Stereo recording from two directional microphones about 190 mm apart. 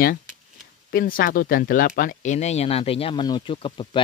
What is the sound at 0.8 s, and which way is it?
Speech, 50° left (ahead or behind).